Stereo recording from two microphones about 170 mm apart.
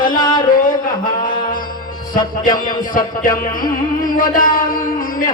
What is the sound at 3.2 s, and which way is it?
Speech, 50° left (ahead or behind).